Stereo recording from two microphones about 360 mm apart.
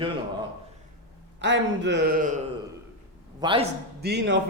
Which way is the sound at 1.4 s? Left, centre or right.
Right.